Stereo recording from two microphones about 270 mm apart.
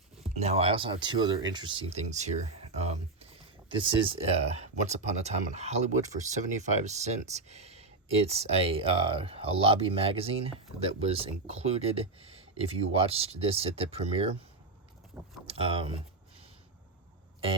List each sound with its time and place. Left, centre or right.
0.2 s speech: right
15.1 s speech: centre
15.4 s speech: right